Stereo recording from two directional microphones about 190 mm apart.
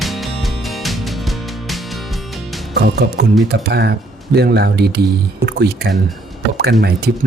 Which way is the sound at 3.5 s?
60° right (ahead or behind).